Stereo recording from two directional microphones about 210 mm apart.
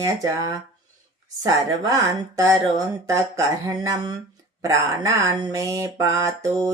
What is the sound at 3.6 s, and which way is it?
Speech, 15° right (ahead or behind).